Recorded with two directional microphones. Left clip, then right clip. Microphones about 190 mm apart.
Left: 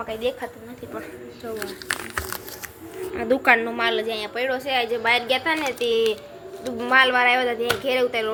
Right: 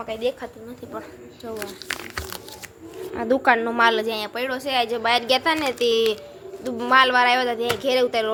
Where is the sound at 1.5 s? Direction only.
10° right (ahead or behind).